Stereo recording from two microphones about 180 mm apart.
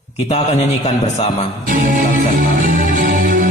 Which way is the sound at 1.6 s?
45° right (ahead or behind).